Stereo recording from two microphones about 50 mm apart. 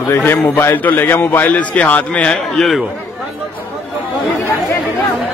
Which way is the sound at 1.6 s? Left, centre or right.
Left.